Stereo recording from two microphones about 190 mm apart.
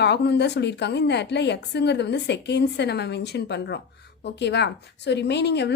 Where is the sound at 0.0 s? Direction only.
60° left (ahead or behind).